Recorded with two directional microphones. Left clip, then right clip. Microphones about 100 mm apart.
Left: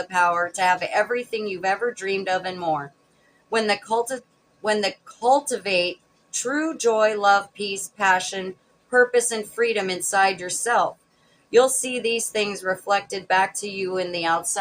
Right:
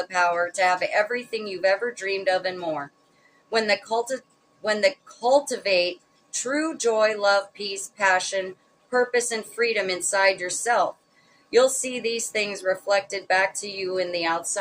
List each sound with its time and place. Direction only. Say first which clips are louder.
0.1 s speech: left 3 dB; 40° left (ahead or behind)